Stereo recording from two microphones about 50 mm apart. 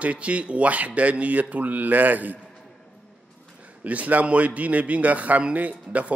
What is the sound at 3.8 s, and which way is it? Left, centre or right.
Speech, right.